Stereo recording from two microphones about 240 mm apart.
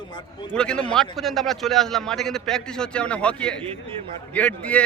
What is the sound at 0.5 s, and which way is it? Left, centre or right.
A man's voice, centre.